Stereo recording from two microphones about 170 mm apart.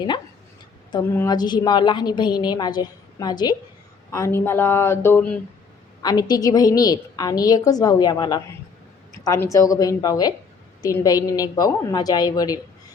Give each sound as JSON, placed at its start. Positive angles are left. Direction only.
{"t": 1.1, "sound": "a woman's voice", "side_deg": 20}
{"t": 4.1, "sound": "a sound", "side_deg": 15}
{"t": 6.0, "sound": "a woman's voice", "side_deg": 25}